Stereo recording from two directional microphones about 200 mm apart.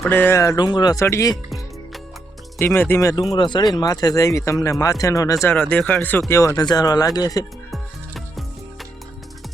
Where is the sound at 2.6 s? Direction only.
10° left (ahead or behind).